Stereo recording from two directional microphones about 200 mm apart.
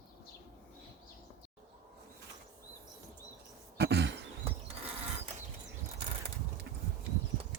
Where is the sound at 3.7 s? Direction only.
55° right (ahead or behind).